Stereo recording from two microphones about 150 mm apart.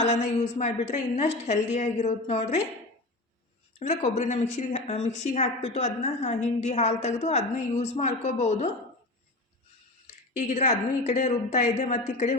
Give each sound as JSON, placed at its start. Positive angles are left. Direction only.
{"t": 0.0, "sound": "a woman's voice", "side_deg": 50}
{"t": 3.8, "sound": "a woman's voice", "side_deg": 50}
{"t": 10.1, "sound": "a woman's voice", "side_deg": 50}